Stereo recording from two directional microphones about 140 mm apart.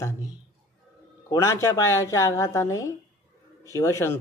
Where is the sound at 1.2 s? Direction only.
20° left (ahead or behind).